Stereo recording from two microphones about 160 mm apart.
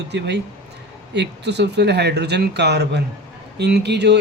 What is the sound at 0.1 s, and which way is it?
Speech, 90° right.